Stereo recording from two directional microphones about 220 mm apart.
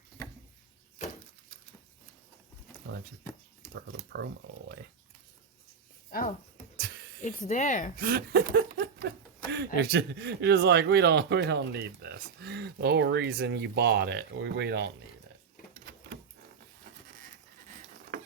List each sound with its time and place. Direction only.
6.1 s speech: 40° left (ahead or behind)
7.9 s a sound: 45° right (ahead or behind)
9.5 s speech: 50° right (ahead or behind)